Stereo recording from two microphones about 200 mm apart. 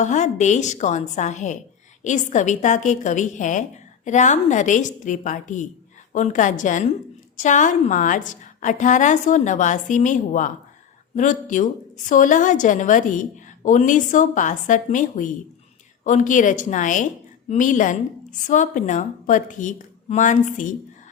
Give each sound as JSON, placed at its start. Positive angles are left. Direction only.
{"t": 0.0, "sound": "a woman's voice", "side_deg": 35}